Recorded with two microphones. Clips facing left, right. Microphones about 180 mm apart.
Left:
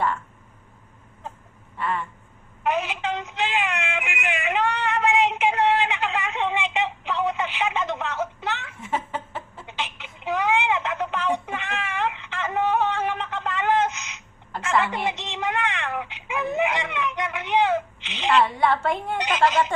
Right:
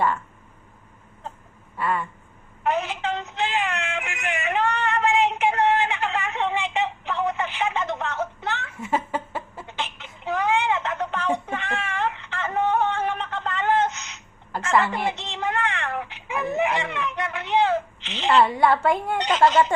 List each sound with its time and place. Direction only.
1.8 s a woman's voice: 5° right (ahead or behind)
2.6 s a sound: 15° left (ahead or behind)
14.6 s speech: 15° left (ahead or behind)
18.5 s a woman's voice: centre (ahead or behind)